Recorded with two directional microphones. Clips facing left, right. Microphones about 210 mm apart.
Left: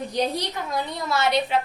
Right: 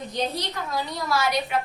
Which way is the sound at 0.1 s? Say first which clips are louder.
Left 2 dB; 10° left (ahead or behind).